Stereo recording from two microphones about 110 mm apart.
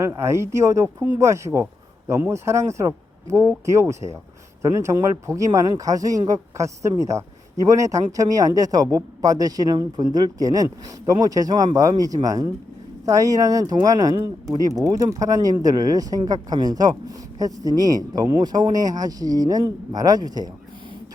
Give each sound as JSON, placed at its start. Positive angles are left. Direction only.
{"t": 0.1, "sound": "speech", "side_deg": -25}